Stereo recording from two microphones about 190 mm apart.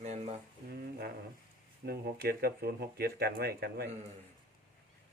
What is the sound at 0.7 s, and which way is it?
Speech, 55° right (ahead or behind).